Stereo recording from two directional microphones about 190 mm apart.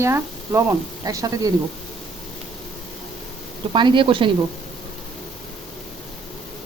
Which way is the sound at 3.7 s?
25° right (ahead or behind).